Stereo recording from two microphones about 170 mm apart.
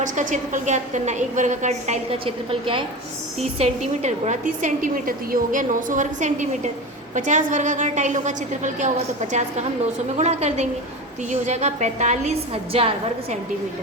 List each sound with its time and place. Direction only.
0.0 s a woman's voice: 50° right (ahead or behind); by 2.8 s 30° right (ahead or behind)
3.6 s a woman's voice: 45° right (ahead or behind)
10.2 s a woman's voice: 40° right (ahead or behind)